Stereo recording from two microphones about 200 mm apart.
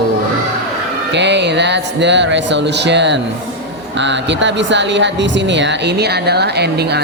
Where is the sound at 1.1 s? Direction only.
60° right (ahead or behind).